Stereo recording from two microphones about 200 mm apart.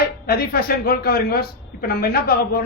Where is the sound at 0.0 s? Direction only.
50° left (ahead or behind).